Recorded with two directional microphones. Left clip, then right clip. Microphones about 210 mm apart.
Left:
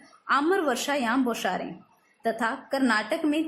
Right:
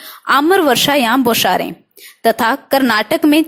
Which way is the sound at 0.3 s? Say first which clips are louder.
Right 12 dB; 40° right (ahead or behind).